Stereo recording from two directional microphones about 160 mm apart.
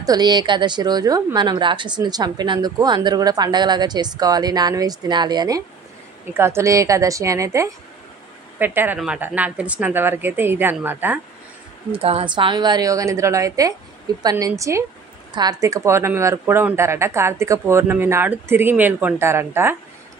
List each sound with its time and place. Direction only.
0.0 s a woman's voice: 25° right (ahead or behind)
11.9 s a woman's voice: 35° right (ahead or behind); by 19.8 s 15° right (ahead or behind)